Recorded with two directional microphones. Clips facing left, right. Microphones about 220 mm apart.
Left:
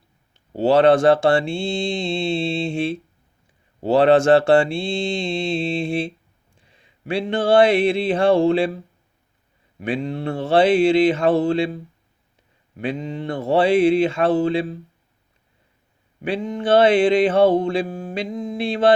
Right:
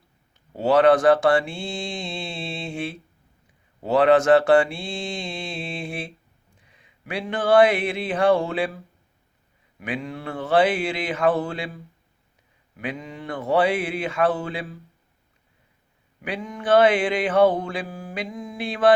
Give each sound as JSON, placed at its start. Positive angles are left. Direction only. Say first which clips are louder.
{"t": 0.3, "sound": "mantra", "louder": "left 3 dB", "side_deg": 30}
{"t": 16.2, "sound": "mantra", "louder": "left 6 dB", "side_deg": 25}